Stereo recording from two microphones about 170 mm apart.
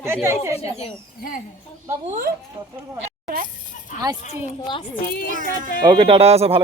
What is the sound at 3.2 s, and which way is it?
Speech, 55° right (ahead or behind).